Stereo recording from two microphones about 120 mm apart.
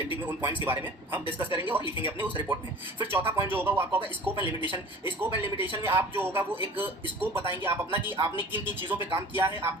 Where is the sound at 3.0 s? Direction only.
15° right (ahead or behind).